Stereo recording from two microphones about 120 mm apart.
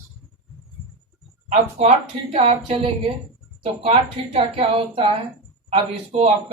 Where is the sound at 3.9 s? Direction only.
50° right (ahead or behind).